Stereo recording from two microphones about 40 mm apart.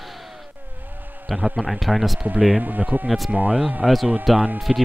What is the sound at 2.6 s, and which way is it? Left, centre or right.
Speech, right.